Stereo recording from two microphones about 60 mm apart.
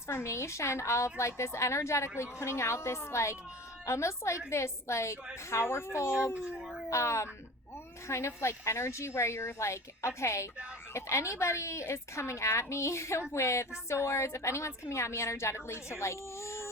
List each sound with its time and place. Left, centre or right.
0.1 s a woman's voice: left
6.3 s howl: centre
6.9 s a woman's voice: left